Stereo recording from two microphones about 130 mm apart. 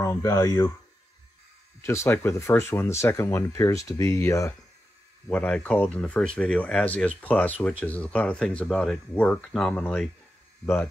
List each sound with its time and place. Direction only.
0.0 s speech: 25° left (ahead or behind)
1.8 s speech: 20° left (ahead or behind)